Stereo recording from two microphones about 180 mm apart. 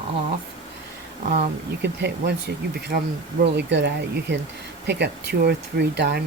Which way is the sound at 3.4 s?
75° right (ahead or behind).